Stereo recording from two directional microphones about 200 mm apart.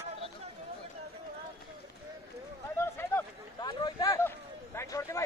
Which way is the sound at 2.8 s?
10° left (ahead or behind).